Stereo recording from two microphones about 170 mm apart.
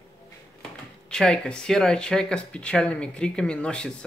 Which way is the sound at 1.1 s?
5° left (ahead or behind).